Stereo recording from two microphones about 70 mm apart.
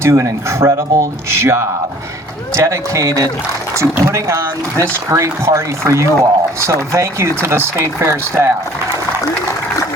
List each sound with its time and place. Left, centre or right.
0.0 s speech: right